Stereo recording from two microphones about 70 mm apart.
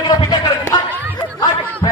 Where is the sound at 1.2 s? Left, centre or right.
Left.